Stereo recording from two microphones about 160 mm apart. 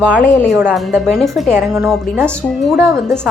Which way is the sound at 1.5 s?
15° right (ahead or behind).